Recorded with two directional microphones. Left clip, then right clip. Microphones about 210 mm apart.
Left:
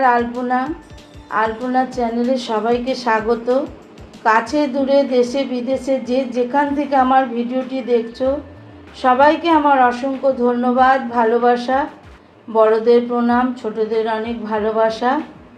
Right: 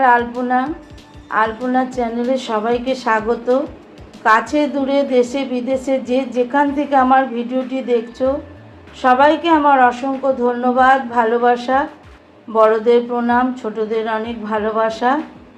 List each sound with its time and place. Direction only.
0.0 s a woman's voice: 15° right (ahead or behind)
1.7 s a woman's voice: 15° right (ahead or behind)
4.2 s a woman's voice: 15° right (ahead or behind)